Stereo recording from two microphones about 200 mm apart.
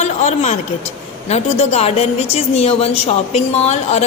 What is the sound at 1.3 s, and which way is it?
A woman's voice, 30° left (ahead or behind).